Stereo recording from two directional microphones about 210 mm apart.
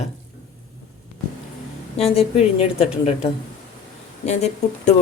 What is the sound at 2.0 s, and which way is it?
A woman's voice, 30° left (ahead or behind).